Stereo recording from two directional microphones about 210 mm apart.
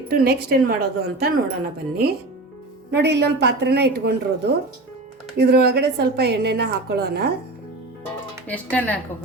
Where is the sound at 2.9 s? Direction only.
55° right (ahead or behind).